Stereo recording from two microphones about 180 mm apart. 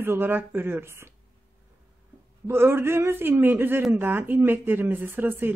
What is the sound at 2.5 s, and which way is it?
A man's voice, 15° right (ahead or behind).